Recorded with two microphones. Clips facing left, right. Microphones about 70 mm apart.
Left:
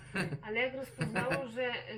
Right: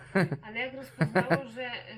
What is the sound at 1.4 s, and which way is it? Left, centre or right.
Speech, centre.